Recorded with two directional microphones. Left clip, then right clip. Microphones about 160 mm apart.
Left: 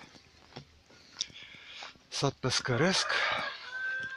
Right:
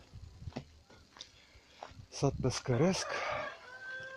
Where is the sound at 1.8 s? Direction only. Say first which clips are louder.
Left 3 dB; centre (ahead or behind).